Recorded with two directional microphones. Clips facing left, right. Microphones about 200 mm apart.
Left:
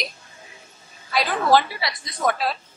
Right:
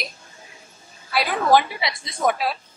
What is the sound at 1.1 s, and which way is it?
A woman's voice, 10° right (ahead or behind).